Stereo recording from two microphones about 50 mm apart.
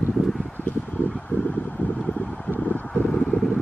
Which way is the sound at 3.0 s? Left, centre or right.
Centre.